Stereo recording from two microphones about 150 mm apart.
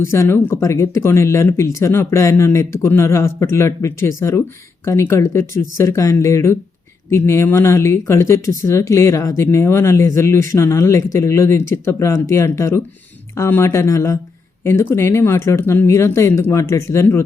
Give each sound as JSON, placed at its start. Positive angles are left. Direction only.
{"t": 0.0, "sound": "speech", "side_deg": 15}